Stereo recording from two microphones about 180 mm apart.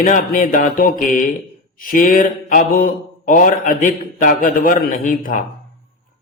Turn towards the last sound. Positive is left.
turn(degrees=50)  # may be behind; listen again after turning